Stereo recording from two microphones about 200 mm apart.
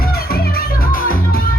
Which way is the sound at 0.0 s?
50° left (ahead or behind).